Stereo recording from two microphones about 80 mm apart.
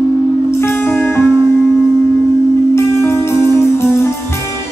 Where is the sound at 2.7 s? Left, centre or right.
Left.